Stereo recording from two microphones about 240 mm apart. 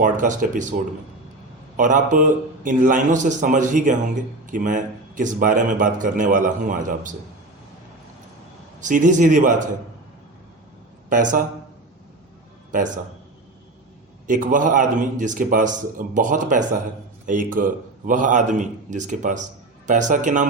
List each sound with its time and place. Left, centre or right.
0.0 s a man's voice: right
1.7 s a man's voice: right
8.8 s a man's voice: right
11.1 s a man's voice: right
12.7 s a man's voice: right
14.3 s a man's voice: right